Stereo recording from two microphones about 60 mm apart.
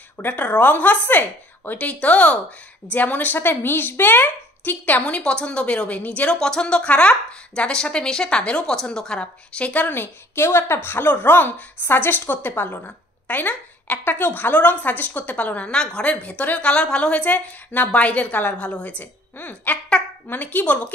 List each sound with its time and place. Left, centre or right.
0.2 s a woman's voice: left
10.3 s a woman's voice: left